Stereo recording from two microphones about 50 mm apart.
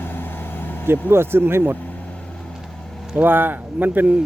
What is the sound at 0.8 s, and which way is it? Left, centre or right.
Speech, right.